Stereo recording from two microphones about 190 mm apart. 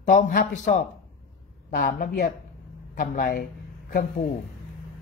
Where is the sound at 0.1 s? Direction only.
45° left (ahead or behind).